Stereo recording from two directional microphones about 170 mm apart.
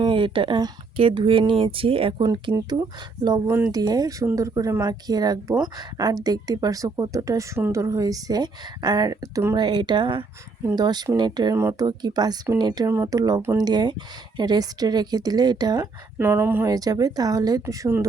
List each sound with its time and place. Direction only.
0.0 s speech: 30° right (ahead or behind)